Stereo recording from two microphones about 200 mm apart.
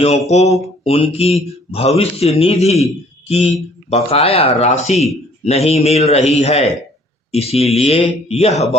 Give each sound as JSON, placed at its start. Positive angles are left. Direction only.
{"t": 0.0, "sound": "a man's voice", "side_deg": 35}